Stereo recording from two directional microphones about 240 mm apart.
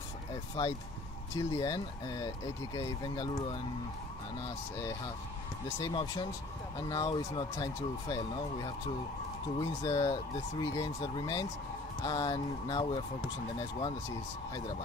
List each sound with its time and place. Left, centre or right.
0.3 s vehicle: centre
1.3 s speech: centre
4.7 s speech: centre